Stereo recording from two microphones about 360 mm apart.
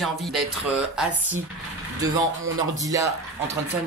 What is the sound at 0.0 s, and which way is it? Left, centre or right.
Speech, centre.